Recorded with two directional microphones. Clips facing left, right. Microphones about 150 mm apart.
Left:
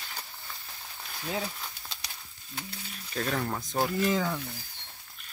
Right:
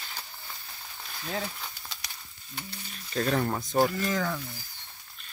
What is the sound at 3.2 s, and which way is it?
Speech, 5° right (ahead or behind).